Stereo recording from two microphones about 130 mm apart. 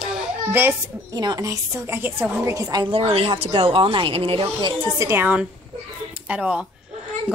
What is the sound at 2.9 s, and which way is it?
Speech, 50° right (ahead or behind).